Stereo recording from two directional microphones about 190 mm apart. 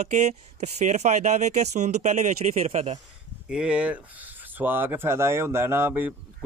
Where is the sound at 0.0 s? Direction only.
35° right (ahead or behind).